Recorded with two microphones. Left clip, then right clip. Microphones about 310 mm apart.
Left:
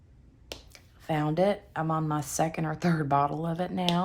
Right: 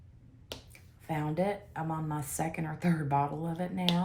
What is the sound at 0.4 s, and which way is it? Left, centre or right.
Speech, centre.